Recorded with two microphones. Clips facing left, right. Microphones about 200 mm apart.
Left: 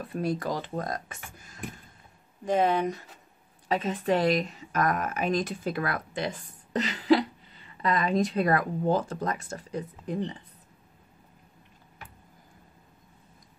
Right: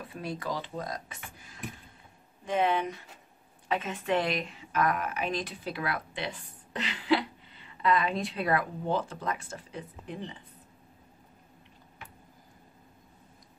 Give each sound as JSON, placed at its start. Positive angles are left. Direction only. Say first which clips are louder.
{"t": 0.0, "sound": "speech", "louder": "left 7 dB", "side_deg": 45}